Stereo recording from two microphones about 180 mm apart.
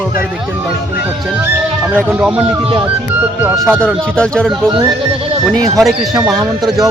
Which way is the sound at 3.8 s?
5° left (ahead or behind).